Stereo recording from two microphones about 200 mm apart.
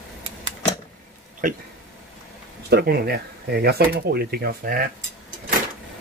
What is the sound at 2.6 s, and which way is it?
Speech, 50° right (ahead or behind).